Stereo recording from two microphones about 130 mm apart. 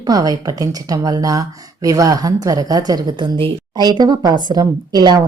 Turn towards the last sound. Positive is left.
turn(degrees=-30)  # may be behind; listen again after turning